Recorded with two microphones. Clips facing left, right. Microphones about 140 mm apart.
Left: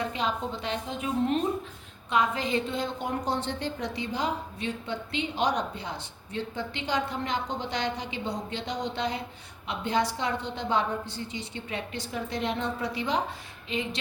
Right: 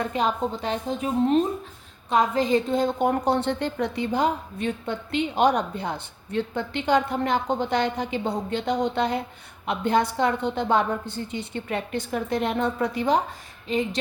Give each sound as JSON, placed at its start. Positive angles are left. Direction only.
{"t": 0.0, "sound": "a woman's voice", "side_deg": -45}